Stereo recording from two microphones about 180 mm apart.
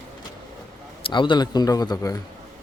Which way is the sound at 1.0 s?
25° left (ahead or behind).